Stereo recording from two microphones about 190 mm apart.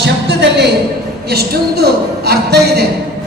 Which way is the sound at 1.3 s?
55° right (ahead or behind).